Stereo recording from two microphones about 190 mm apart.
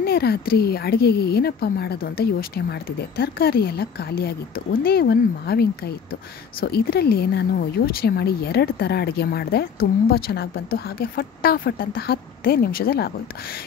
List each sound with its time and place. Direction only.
0.0 s speech: 55° left (ahead or behind)